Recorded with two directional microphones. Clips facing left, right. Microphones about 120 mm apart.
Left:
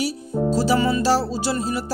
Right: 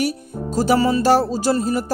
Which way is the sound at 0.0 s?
50° right (ahead or behind).